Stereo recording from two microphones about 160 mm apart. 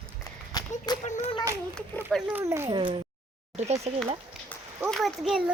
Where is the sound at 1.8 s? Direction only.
5° left (ahead or behind).